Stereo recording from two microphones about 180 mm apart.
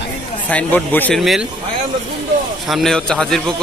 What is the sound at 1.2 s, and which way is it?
Speech, centre (ahead or behind).